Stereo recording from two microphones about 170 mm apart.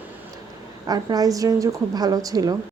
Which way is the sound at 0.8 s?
20° right (ahead or behind).